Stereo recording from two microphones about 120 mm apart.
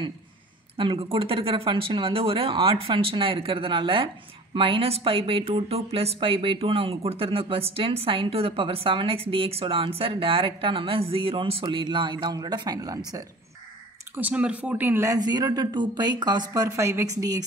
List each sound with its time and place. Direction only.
0.7 s speech: 50° right (ahead or behind); by 13.2 s 30° right (ahead or behind)
14.1 s speech: 10° right (ahead or behind)
15.0 s speech: 35° right (ahead or behind)
16.6 s a woman's voice: 25° right (ahead or behind)